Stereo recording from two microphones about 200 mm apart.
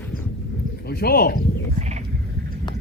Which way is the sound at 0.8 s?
50° left (ahead or behind).